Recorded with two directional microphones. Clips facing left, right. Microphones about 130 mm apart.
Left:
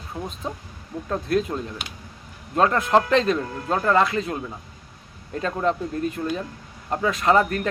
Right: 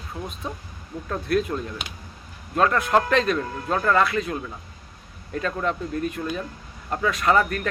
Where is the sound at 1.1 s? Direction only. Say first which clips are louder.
Even; 30° left (ahead or behind).